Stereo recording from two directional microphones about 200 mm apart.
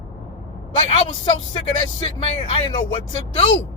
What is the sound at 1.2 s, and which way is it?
Speech, 25° left (ahead or behind).